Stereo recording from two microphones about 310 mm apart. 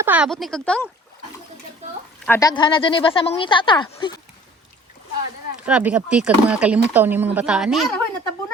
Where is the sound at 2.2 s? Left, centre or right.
Centre.